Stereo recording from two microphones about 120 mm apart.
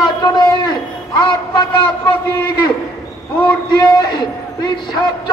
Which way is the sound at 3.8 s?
35° left (ahead or behind).